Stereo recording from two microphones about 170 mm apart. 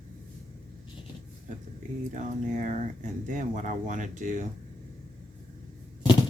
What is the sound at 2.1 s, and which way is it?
Speech, 50° right (ahead or behind).